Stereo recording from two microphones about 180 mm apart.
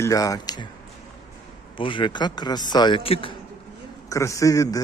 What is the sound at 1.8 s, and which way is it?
A man's voice, 25° left (ahead or behind).